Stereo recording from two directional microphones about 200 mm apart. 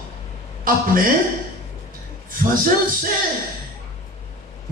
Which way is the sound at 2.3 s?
45° right (ahead or behind).